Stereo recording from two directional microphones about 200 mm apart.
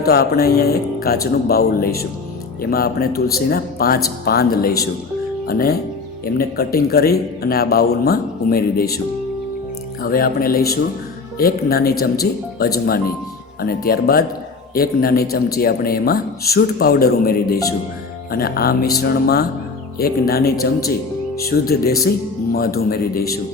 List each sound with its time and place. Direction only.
0.0 s a man's voice: 50° left (ahead or behind)
10.0 s a man's voice: 50° left (ahead or behind)